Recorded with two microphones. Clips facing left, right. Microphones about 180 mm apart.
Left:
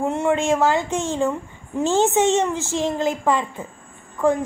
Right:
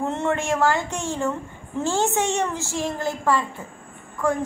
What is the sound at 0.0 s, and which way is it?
Speech, 10° left (ahead or behind).